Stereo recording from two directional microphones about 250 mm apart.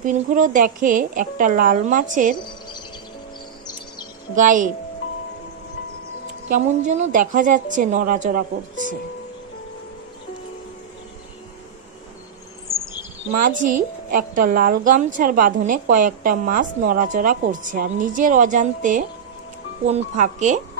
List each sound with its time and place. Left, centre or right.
0.0 s a woman's voice: right
4.4 s a woman's voice: right
6.5 s a woman's voice: right
13.5 s a woman's voice: right